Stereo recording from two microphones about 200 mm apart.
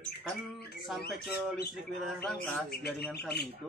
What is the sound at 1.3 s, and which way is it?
Speech, centre (ahead or behind).